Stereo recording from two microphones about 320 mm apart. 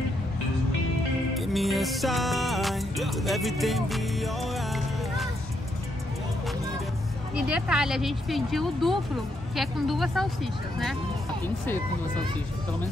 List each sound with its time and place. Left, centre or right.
1.3 s music: centre
7.4 s speech: centre